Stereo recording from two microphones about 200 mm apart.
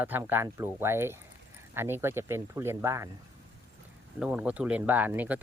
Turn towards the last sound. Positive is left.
turn(degrees=-10)  # may be behind; listen again after turning